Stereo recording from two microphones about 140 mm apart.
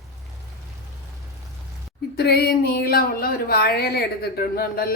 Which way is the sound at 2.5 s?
90° left.